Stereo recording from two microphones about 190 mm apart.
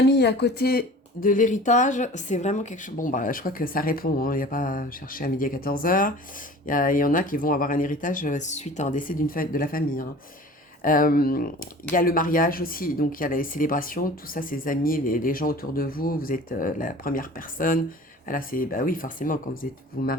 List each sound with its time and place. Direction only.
0.0 s speech: 60° left (ahead or behind)